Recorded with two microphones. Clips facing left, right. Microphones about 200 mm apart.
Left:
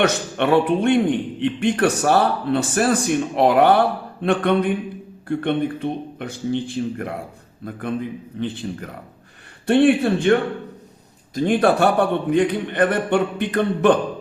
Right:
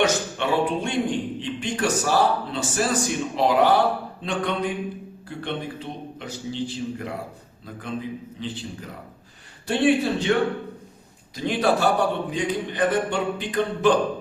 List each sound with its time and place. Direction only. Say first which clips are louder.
0.0 s a man's voice: left 3 dB; 60° left (ahead or behind)
11.3 s a man's voice: left 5 dB; 50° left (ahead or behind)